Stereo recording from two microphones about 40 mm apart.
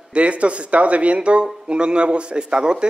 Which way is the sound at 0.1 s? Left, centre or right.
Right.